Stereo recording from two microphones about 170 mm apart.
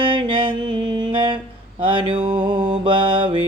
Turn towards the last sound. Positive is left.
turn(degrees=-30)  # may be behind; listen again after turning